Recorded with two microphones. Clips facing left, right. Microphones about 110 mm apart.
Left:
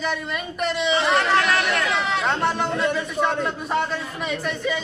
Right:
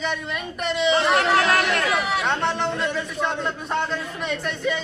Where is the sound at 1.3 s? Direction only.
40° right (ahead or behind).